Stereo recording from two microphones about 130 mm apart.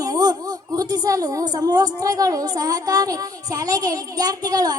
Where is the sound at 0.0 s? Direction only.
30° right (ahead or behind).